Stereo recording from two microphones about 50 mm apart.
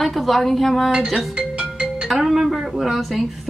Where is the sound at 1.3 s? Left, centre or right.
Centre.